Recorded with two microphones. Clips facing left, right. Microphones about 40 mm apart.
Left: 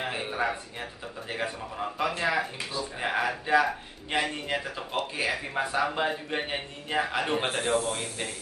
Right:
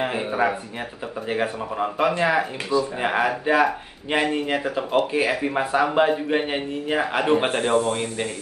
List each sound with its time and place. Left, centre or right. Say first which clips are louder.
0.0 s speech: right 7 dB; right
7.4 s speech: right 7 dB; right
7.9 s speech: right 8 dB; right